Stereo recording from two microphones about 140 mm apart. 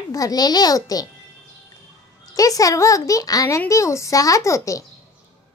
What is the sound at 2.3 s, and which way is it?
A child's voice, 25° left (ahead or behind).